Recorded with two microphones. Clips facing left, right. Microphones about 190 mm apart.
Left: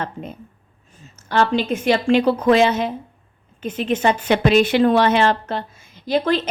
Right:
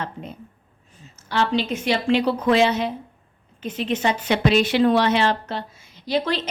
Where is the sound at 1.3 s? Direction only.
50° left (ahead or behind).